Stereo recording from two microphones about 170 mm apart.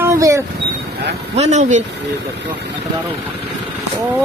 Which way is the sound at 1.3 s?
40° right (ahead or behind).